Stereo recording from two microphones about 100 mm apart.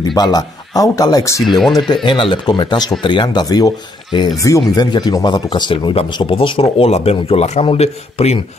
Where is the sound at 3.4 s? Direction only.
40° left (ahead or behind).